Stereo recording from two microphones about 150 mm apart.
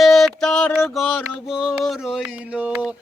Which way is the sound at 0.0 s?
Centre (ahead or behind).